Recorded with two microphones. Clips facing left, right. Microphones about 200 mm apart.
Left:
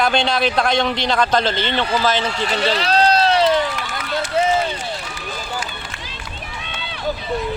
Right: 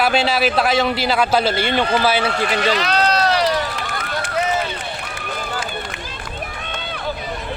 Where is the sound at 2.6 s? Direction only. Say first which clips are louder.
Left 3 dB; 30° left (ahead or behind).